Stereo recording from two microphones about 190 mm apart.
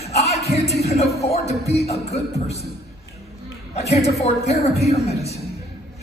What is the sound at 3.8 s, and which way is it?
Speech, 35° left (ahead or behind).